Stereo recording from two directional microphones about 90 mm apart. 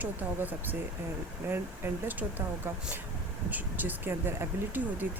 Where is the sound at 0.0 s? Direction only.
20° right (ahead or behind).